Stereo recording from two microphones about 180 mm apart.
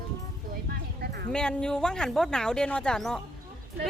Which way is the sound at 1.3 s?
5° left (ahead or behind).